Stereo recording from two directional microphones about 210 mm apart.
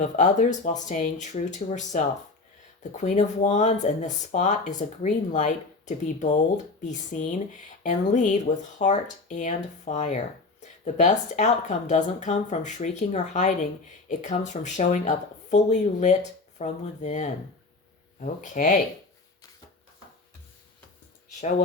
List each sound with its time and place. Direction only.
0.0 s speech: 35° left (ahead or behind)